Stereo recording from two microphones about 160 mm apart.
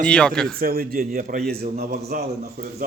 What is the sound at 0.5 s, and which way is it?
Speech, 70° right (ahead or behind).